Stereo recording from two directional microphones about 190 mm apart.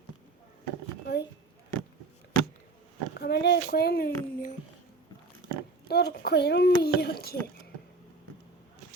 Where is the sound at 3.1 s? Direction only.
60° left (ahead or behind).